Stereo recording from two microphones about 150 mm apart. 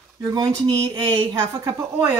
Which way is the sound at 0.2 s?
25° right (ahead or behind).